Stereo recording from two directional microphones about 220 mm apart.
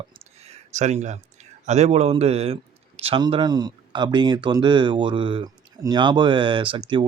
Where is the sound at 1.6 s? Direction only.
30° right (ahead or behind).